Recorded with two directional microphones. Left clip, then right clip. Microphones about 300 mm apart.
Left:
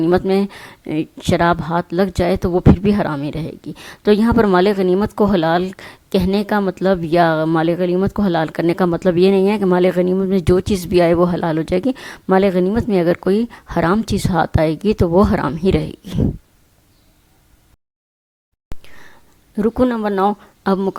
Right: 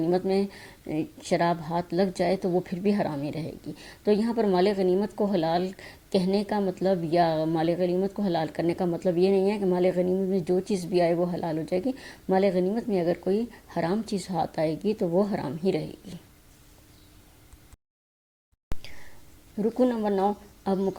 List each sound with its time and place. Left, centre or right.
0.0 s speech: left
18.7 s whispering: centre
19.5 s speech: left